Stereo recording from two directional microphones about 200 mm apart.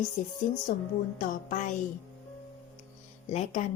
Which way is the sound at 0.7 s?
45° left (ahead or behind).